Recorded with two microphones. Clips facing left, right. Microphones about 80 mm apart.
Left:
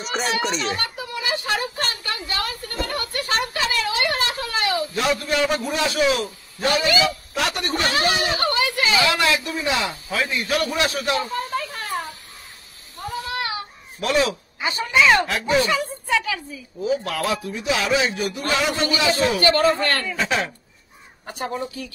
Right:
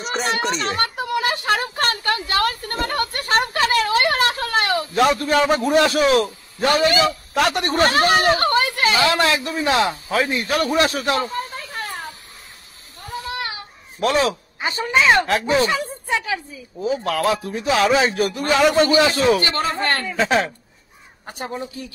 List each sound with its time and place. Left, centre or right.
0.0 s a child's voice: centre
0.7 s a woman's voice: right
13.9 s speech: right
19.4 s speech: right